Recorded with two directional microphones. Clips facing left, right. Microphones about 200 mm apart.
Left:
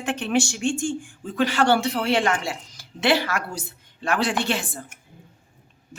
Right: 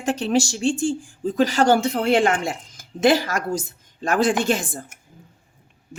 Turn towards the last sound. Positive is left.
turn(degrees=-45)  # may be behind; listen again after turning